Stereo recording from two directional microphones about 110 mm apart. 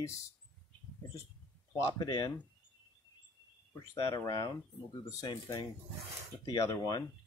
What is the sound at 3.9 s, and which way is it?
Speech, 30° left (ahead or behind).